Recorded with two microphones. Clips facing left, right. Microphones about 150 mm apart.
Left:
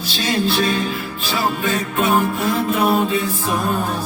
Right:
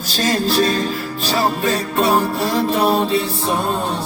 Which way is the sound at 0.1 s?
40° right (ahead or behind).